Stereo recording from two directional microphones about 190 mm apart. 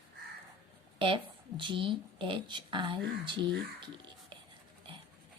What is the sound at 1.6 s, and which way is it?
Speech, 25° right (ahead or behind).